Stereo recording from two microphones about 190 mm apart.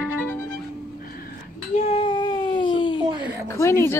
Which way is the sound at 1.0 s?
50° left (ahead or behind).